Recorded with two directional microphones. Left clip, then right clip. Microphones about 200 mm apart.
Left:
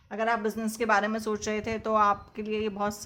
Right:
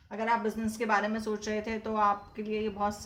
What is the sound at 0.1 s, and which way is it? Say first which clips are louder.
Speech: left 2 dB; 45° left (ahead or behind).